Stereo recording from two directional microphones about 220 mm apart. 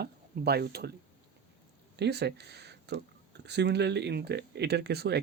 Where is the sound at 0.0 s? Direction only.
45° right (ahead or behind).